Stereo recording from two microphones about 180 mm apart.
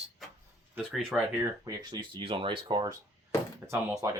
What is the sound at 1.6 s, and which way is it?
Speech, 25° right (ahead or behind).